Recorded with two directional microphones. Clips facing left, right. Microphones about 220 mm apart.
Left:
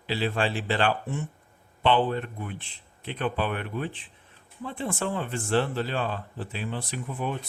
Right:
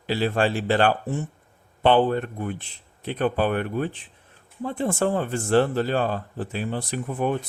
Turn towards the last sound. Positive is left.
turn(degrees=-50)  # may be behind; listen again after turning